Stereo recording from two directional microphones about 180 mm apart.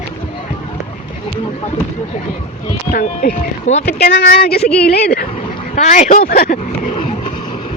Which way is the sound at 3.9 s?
60° left (ahead or behind).